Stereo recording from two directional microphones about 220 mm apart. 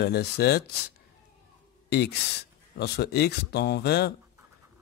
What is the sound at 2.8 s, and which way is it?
Speech, 50° left (ahead or behind).